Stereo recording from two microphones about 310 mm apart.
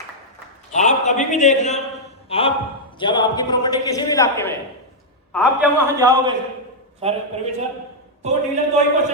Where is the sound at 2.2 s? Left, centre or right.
Centre.